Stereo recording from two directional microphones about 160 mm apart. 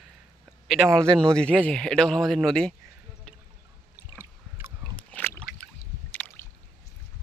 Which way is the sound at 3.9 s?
15° right (ahead or behind).